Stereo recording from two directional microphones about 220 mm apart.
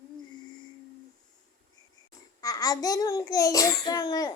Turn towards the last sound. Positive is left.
turn(degrees=15)  # may be behind; listen again after turning